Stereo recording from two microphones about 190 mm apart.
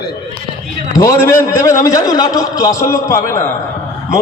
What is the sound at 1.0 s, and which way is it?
A man's voice, 15° left (ahead or behind).